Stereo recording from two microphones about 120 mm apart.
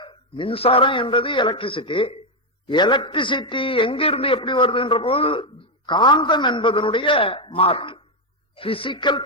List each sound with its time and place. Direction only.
0.0 s a man's voice: 45° left (ahead or behind)